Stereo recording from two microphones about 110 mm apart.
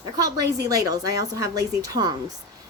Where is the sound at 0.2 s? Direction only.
35° right (ahead or behind).